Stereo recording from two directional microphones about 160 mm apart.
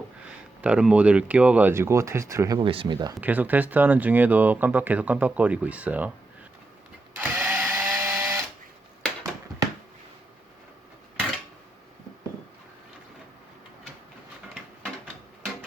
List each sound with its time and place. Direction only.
0.6 s speech: 5° right (ahead or behind)
2.6 s speech: 35° right (ahead or behind)
3.2 s speech: 10° right (ahead or behind)
7.2 s printer: 10° right (ahead or behind)